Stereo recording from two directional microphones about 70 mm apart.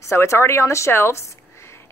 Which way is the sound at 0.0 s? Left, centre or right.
Left.